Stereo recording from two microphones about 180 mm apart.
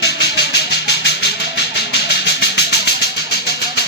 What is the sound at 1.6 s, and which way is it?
Vehicle, 70° left (ahead or behind).